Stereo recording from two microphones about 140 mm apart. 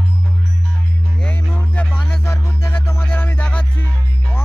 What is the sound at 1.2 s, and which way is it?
Music, 10° left (ahead or behind).